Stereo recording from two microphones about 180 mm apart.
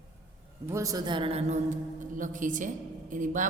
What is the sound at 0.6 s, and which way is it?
A woman's voice, 15° right (ahead or behind).